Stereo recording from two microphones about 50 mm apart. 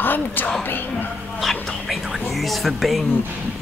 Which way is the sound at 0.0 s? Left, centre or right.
Left.